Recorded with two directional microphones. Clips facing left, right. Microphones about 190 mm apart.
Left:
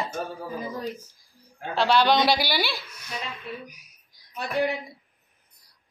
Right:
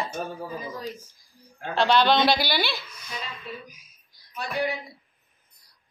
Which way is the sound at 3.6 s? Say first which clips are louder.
Left 4 dB; 70° left (ahead or behind).